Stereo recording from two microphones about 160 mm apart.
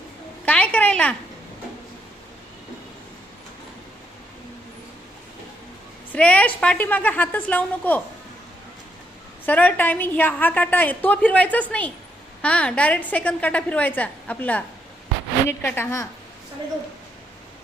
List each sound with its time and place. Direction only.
0.4 s a sound: 10° left (ahead or behind)
6.1 s a woman's voice: 10° left (ahead or behind)
9.5 s a woman's voice: 10° left (ahead or behind)